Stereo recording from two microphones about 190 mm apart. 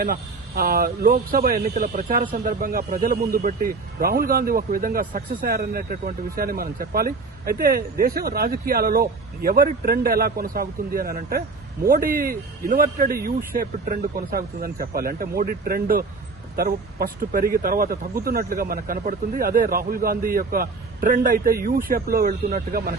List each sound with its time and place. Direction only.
0.0 s speech: 50° right (ahead or behind)